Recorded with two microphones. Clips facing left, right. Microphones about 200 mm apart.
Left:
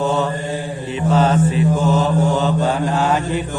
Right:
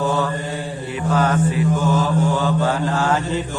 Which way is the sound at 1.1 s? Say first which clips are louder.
Left 3 dB; 25° left (ahead or behind).